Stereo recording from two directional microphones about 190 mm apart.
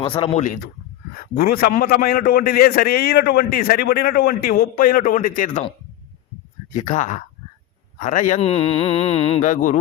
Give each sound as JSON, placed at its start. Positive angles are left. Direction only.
{"t": 0.0, "sound": "speech", "side_deg": 30}
{"t": 1.1, "sound": "a man's voice", "side_deg": 50}
{"t": 6.7, "sound": "speech", "side_deg": 40}